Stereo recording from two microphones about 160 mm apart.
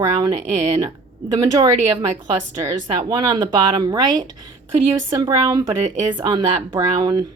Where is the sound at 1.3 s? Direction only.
25° right (ahead or behind).